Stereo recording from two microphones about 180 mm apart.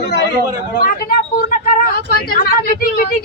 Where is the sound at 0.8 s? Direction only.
55° left (ahead or behind).